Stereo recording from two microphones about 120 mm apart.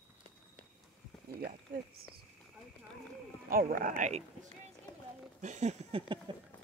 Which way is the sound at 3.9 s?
85° right.